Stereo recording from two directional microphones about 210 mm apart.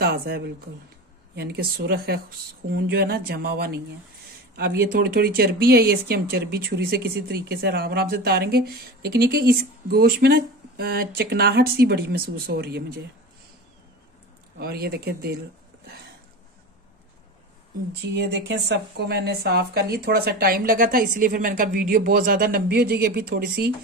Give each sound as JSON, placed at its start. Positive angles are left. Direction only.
{"t": 0.0, "sound": "speech", "side_deg": -50}
{"t": 14.6, "sound": "speech", "side_deg": -45}
{"t": 18.0, "sound": "speech", "side_deg": -55}